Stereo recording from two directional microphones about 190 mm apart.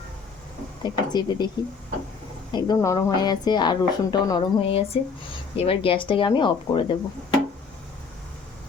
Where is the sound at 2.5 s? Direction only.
20° left (ahead or behind).